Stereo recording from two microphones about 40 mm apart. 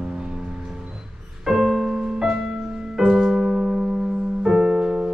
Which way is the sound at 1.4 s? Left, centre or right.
Centre.